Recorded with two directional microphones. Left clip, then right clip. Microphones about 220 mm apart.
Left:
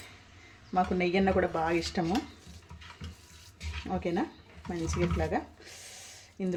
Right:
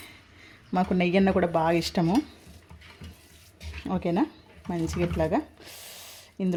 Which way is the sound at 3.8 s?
35° right (ahead or behind).